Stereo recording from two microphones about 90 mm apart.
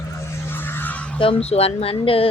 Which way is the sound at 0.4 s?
25° left (ahead or behind).